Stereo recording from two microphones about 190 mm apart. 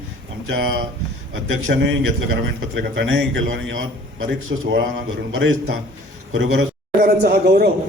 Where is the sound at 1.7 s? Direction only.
70° right (ahead or behind).